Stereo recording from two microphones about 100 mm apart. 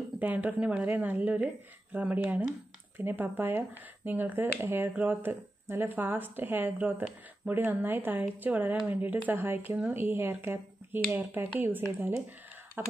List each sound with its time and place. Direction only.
0.2 s speech: 15° right (ahead or behind)